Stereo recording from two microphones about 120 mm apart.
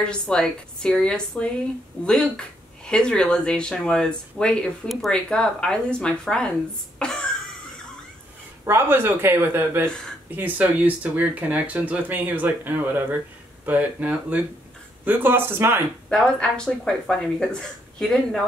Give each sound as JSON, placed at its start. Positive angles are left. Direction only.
{"t": 0.0, "sound": "speech", "side_deg": 5}
{"t": 7.0, "sound": "cough", "side_deg": 5}
{"t": 8.6, "sound": "speech", "side_deg": -20}
{"t": 9.8, "sound": "speech", "side_deg": 5}
{"t": 10.3, "sound": "speech", "side_deg": -15}
{"t": 16.1, "sound": "speech", "side_deg": 5}